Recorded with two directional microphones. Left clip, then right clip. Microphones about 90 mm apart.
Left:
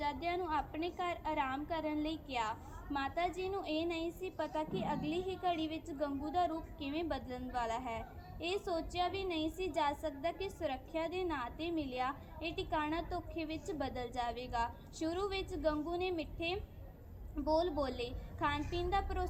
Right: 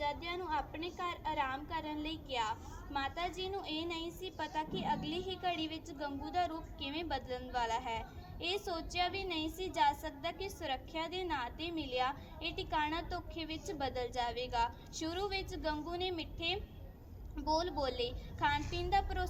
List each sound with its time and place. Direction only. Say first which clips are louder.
0.0 s a woman's voice: left 1 dB; 65° left (ahead or behind); by 19.3 s 30° left (ahead or behind)